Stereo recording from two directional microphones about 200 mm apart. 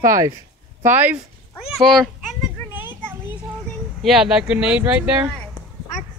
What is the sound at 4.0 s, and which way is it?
Speech, 5° right (ahead or behind).